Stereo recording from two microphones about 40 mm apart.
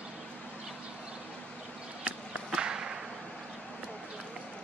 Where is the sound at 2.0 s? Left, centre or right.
Right.